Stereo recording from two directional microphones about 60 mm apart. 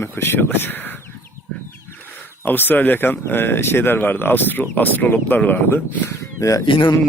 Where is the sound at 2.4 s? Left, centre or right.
Left.